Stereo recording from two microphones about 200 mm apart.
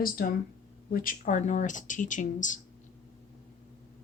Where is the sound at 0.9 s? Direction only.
45° left (ahead or behind).